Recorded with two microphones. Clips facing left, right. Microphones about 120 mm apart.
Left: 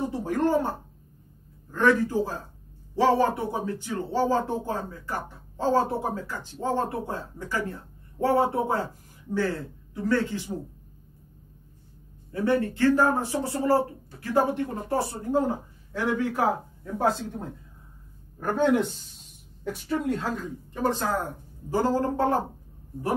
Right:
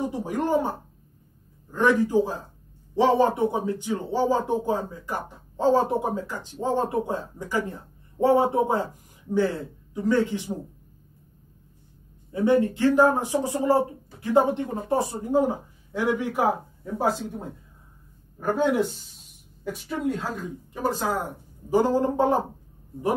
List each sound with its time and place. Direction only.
0.0 s speech: 15° right (ahead or behind)
12.3 s speech: 20° right (ahead or behind)